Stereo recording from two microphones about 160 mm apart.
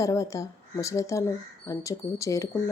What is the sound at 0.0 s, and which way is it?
Speech, 20° left (ahead or behind).